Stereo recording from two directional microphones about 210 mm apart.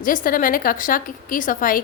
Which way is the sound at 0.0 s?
40° left (ahead or behind).